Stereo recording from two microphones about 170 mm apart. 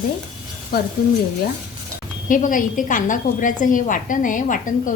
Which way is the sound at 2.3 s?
50° left (ahead or behind).